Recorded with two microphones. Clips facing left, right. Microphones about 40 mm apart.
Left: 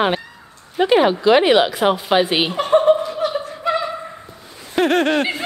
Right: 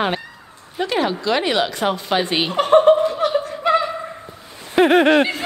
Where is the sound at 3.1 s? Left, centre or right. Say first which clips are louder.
Right 2 dB; right.